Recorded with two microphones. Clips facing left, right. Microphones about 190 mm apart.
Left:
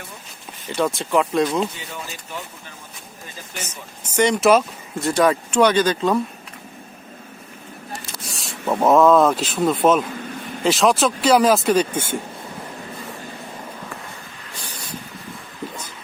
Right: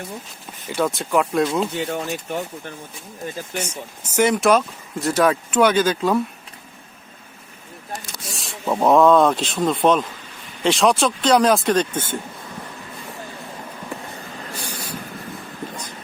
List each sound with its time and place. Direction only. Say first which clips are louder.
0.7 s speech: even; centre (ahead or behind)
1.7 s speech: right 10 dB; 60° right (ahead or behind)
3.6 s speech: right 5 dB; 10° right (ahead or behind)
8.2 s speech: left 2 dB; centre (ahead or behind)